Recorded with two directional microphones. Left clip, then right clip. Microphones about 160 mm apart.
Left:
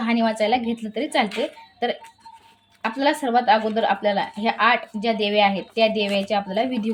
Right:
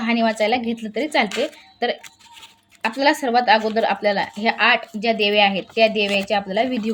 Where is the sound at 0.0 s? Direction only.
20° right (ahead or behind).